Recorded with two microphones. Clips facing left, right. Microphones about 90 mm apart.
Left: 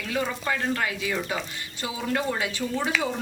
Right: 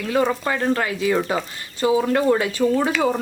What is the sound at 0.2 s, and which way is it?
A woman's voice, 55° right (ahead or behind).